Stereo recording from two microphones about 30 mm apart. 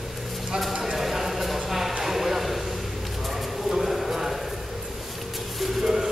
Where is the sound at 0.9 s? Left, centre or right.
Centre.